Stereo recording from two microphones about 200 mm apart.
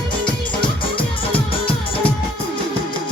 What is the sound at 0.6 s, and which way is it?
Music, 25° left (ahead or behind).